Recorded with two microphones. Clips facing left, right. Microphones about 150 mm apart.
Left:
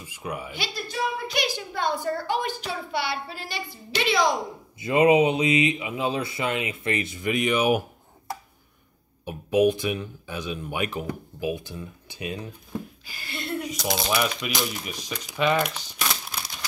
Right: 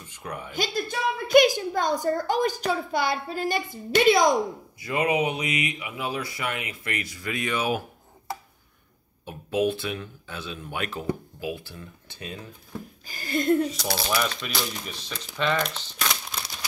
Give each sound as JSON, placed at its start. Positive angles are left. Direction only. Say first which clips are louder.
{"t": 0.0, "sound": "speech", "louder": "left 3 dB", "side_deg": 10}
{"t": 0.5, "sound": "a woman's voice", "louder": "right 5 dB", "side_deg": -50}
{"t": 4.7, "sound": "speech", "louder": "left 7 dB", "side_deg": 25}
{"t": 9.2, "sound": "speech", "louder": "left 4 dB", "side_deg": 15}
{"t": 13.0, "sound": "a woman's voice", "louder": "right 10 dB", "side_deg": -45}
{"t": 13.8, "sound": "speech", "louder": "left 2 dB", "side_deg": 15}